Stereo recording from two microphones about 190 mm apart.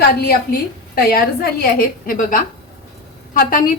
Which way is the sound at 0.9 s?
55° left (ahead or behind).